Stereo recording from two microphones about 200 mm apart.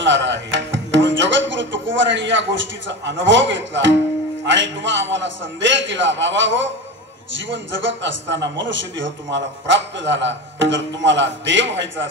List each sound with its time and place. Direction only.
0.0 s a man's voice: 65° right (ahead or behind)